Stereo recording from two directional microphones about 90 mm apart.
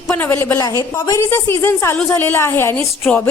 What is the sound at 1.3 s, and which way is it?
A woman's voice, 25° left (ahead or behind).